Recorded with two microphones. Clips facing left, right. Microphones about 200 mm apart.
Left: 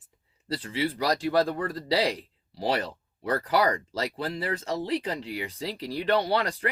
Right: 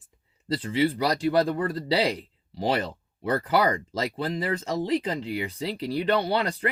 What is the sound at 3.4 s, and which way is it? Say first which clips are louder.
Speech: right 1 dB; 40° left (ahead or behind).